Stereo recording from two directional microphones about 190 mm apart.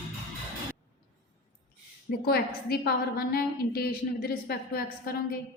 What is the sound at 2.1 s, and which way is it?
A woman's voice, 55° left (ahead or behind).